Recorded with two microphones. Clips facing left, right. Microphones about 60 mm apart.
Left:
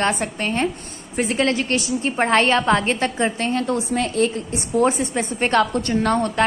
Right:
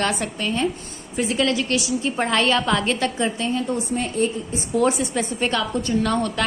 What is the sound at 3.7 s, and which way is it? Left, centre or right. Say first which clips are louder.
Speech: left 3 dB; left.